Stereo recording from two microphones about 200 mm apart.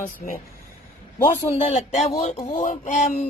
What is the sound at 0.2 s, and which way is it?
Speech, 40° left (ahead or behind).